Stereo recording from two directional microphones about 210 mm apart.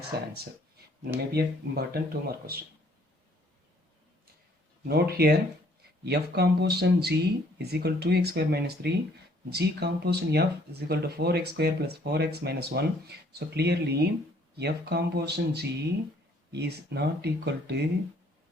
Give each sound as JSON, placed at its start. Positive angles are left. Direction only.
{"t": 0.1, "sound": "speech", "side_deg": -50}
{"t": 4.9, "sound": "speech", "side_deg": -50}